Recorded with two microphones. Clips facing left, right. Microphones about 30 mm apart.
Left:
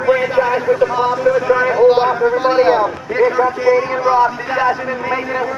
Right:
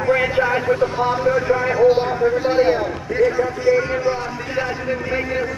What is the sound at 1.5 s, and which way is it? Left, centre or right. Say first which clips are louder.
A man's voice: left 4 dB; left.